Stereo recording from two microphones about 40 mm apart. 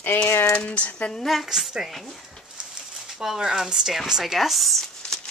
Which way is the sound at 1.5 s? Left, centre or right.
Centre.